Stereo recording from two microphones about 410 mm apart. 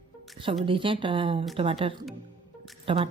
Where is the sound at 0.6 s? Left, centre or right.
Centre.